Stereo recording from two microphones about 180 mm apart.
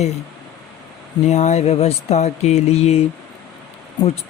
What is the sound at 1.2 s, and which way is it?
Speech, 40° left (ahead or behind).